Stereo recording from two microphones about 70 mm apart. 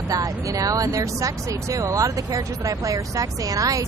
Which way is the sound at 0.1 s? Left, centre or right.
Right.